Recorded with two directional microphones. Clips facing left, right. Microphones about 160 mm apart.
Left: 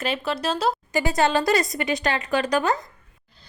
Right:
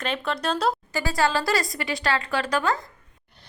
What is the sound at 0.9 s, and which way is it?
Speech, 20° left (ahead or behind).